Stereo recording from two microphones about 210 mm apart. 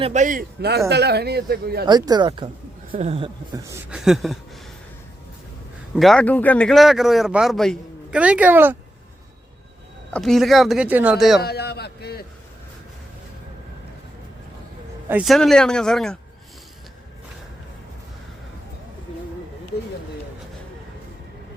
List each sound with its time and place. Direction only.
0.0 s speech: 35° right (ahead or behind); by 1.8 s 50° right (ahead or behind)
1.9 s speech: 20° right (ahead or behind)
3.7 s speech: 5° right (ahead or behind)
6.0 s speech: 5° left (ahead or behind)
10.1 s speech: centre (ahead or behind)
11.3 s a man's voice: 50° left (ahead or behind)
15.1 s speech: centre (ahead or behind)